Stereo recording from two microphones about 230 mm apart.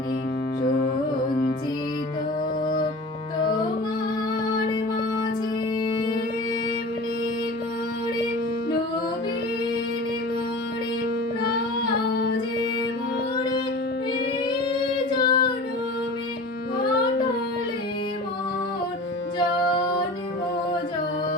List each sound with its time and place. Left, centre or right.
15.2 s child singing: left